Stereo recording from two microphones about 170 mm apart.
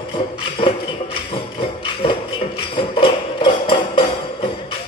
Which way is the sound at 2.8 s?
30° left (ahead or behind).